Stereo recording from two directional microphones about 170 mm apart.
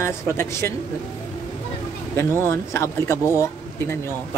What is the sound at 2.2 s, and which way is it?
Speech, 15° left (ahead or behind).